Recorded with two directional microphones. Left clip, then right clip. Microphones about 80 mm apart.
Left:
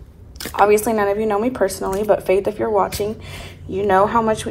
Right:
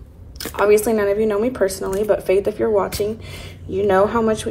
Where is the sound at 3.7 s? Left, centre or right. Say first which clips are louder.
Left 1 dB; right.